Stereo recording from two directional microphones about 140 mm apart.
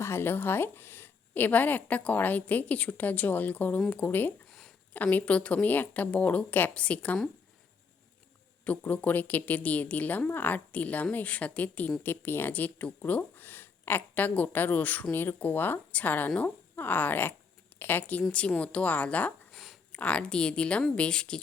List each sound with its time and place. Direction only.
0.0 s a woman's voice: 15° left (ahead or behind)
8.6 s a woman's voice: 10° left (ahead or behind)
19.5 s a sound: centre (ahead or behind)
20.0 s a woman's voice: 10° left (ahead or behind)